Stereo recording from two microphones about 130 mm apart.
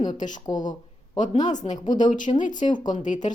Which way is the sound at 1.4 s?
65° left (ahead or behind).